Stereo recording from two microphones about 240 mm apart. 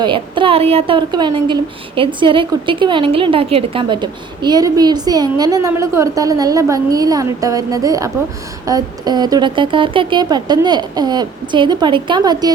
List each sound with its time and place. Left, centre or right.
0.0 s a woman's voice: right